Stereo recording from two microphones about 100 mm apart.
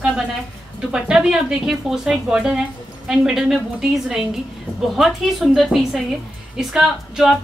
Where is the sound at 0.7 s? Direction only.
5° right (ahead or behind).